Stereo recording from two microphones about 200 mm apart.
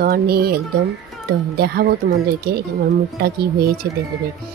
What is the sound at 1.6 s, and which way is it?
Speech, 50° right (ahead or behind).